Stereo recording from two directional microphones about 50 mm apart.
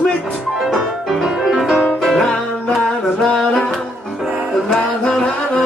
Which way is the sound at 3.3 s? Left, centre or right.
Centre.